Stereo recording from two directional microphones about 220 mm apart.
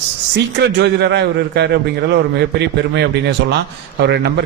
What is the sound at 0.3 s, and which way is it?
A man's voice, 50° right (ahead or behind).